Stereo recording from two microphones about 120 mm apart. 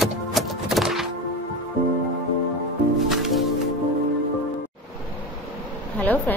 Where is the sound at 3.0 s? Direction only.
Centre (ahead or behind).